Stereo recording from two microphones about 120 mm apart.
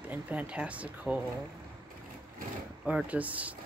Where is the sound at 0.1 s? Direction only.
10° right (ahead or behind).